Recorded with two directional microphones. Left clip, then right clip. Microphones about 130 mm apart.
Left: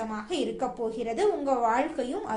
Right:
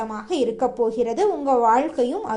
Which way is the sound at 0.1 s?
35° right (ahead or behind).